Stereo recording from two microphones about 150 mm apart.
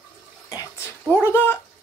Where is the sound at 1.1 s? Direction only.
15° left (ahead or behind).